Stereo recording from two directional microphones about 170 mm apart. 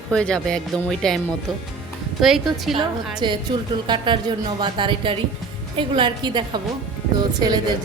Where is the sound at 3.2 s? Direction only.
25° right (ahead or behind).